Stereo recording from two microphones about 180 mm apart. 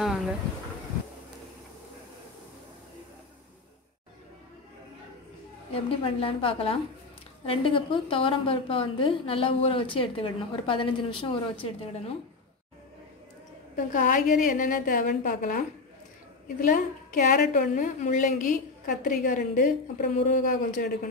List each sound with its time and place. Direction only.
0.0 s a sound: centre (ahead or behind)
5.7 s a woman's voice: 30° left (ahead or behind)
13.9 s a woman's voice: 45° left (ahead or behind)
16.6 s a woman's voice: 45° left (ahead or behind)